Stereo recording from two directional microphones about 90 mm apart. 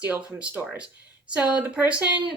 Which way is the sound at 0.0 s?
20° right (ahead or behind).